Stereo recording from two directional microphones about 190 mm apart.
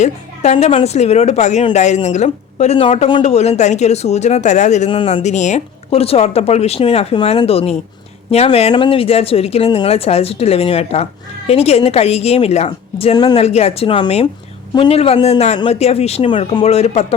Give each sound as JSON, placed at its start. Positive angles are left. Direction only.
{"t": 0.0, "sound": "speech", "side_deg": 35}